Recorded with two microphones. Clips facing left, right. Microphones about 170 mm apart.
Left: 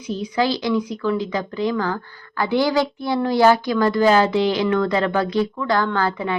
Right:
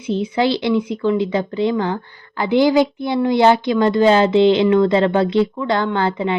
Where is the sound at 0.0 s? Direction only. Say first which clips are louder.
Right 4 dB; 25° right (ahead or behind).